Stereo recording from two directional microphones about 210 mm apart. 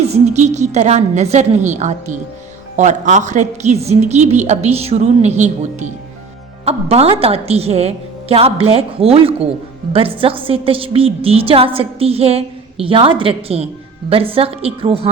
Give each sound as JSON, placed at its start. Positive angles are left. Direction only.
{"t": 0.1, "sound": "a woman's voice", "side_deg": -35}